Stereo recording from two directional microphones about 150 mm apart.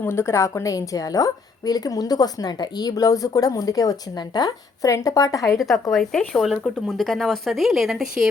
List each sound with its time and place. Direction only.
0.0 s a woman's voice: 15° left (ahead or behind)
5.5 s speech: centre (ahead or behind)